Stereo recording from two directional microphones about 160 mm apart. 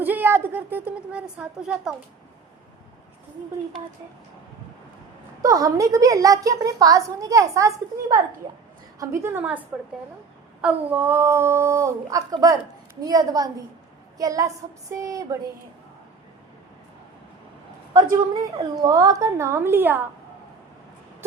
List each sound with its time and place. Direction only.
0.0 s speech: 10° right (ahead or behind)
5.4 s a woman's voice: 20° right (ahead or behind)
9.0 s speech: 15° right (ahead or behind)
10.6 s a woman's voice: 10° right (ahead or behind)
17.9 s a woman's voice: 20° right (ahead or behind)